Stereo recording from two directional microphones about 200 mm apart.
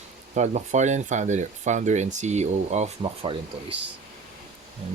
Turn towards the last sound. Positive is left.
turn(degrees=-25)  # may be behind; listen again after turning